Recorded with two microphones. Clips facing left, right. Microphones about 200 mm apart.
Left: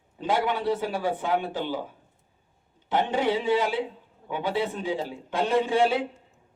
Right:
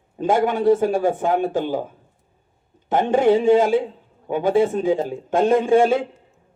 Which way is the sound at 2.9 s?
50° right (ahead or behind).